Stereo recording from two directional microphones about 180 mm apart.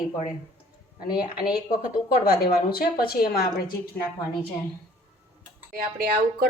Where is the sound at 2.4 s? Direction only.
55° left (ahead or behind).